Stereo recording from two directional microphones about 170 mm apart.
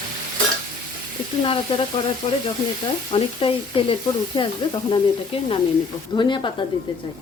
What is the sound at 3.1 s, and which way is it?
Speech, 30° left (ahead or behind).